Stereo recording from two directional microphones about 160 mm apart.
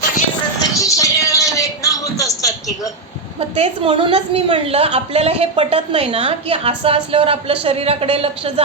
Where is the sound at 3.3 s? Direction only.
40° right (ahead or behind).